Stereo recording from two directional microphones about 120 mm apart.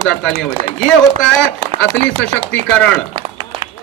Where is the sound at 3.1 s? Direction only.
55° right (ahead or behind).